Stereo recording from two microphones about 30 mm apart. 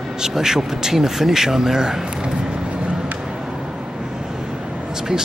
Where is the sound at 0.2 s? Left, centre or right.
Centre.